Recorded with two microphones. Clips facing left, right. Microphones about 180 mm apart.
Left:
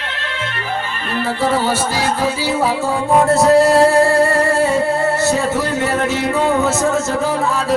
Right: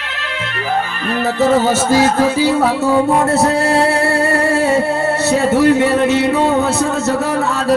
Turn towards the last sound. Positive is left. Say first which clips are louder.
# right 5 dB
turn(degrees=-65)  # may be behind; listen again after turning